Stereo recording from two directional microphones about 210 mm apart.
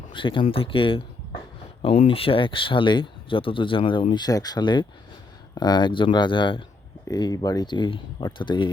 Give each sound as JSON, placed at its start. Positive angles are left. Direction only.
{"t": 0.1, "sound": "speech", "side_deg": 25}
{"t": 2.0, "sound": "speech", "side_deg": 25}